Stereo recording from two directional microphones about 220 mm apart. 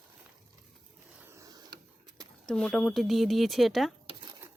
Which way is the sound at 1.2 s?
15° right (ahead or behind).